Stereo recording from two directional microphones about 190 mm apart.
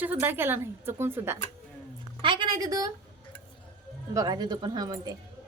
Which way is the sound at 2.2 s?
25° right (ahead or behind).